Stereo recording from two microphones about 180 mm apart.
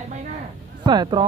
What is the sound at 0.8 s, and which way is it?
Speech, 25° right (ahead or behind).